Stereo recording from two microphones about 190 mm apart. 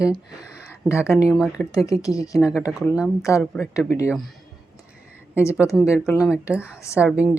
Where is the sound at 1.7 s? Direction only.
15° left (ahead or behind).